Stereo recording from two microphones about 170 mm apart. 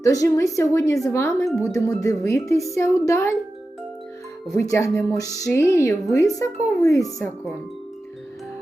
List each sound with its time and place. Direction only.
0.0 s a woman's voice: 20° left (ahead or behind)
4.5 s a woman's voice: 20° left (ahead or behind)